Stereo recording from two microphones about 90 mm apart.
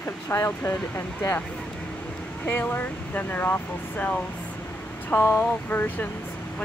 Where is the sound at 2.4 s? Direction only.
25° left (ahead or behind).